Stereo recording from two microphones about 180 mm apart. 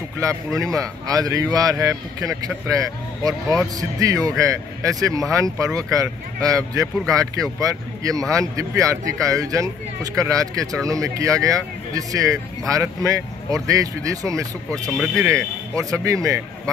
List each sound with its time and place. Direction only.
0.7 s speech: 20° right (ahead or behind)
14.7 s speech: 5° left (ahead or behind)
15.2 s speech: 15° right (ahead or behind)